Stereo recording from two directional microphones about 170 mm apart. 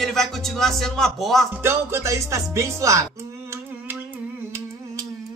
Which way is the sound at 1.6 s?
15° right (ahead or behind).